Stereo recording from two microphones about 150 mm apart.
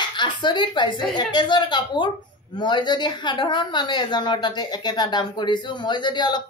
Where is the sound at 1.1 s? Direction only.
30° left (ahead or behind).